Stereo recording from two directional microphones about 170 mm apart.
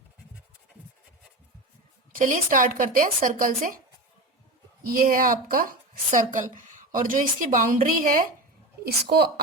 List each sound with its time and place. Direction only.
2.1 s speech: 50° right (ahead or behind)
4.9 s speech: 55° right (ahead or behind)
8.8 s a woman's voice: 65° right (ahead or behind)